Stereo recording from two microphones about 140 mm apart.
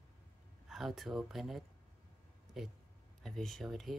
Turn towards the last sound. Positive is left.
turn(degrees=0)  # may be behind; listen again after turning